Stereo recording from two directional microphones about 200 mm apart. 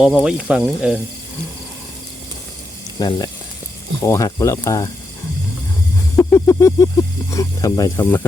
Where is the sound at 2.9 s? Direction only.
20° left (ahead or behind).